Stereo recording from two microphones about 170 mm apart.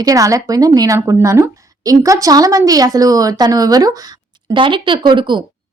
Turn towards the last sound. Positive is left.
turn(degrees=-25)  # may be behind; listen again after turning